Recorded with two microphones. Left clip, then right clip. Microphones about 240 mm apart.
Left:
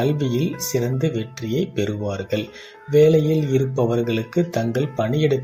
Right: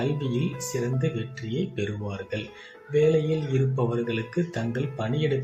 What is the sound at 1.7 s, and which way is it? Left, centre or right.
Speech, left.